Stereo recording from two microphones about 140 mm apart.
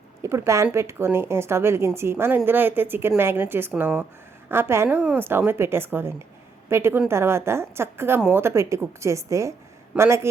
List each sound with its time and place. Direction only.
0.2 s a woman's voice: 20° right (ahead or behind)
9.9 s a woman's voice: 5° right (ahead or behind)